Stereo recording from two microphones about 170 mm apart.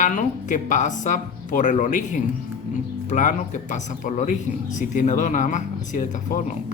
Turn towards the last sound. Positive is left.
turn(degrees=50)  # may be behind; listen again after turning